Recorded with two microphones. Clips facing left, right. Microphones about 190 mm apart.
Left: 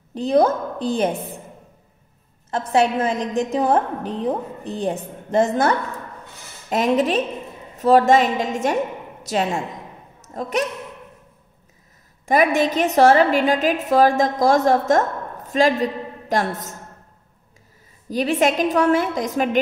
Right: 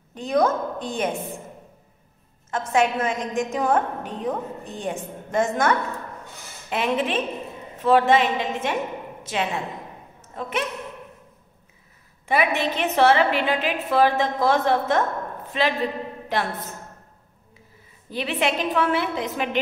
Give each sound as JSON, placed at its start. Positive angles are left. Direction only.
{"t": 0.1, "sound": "a woman's voice", "side_deg": 30}
{"t": 2.7, "sound": "a woman's voice", "side_deg": 35}
{"t": 12.3, "sound": "a woman's voice", "side_deg": 45}
{"t": 18.1, "sound": "a woman's voice", "side_deg": 45}